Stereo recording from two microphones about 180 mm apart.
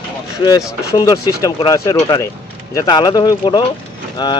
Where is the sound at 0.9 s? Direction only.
20° left (ahead or behind).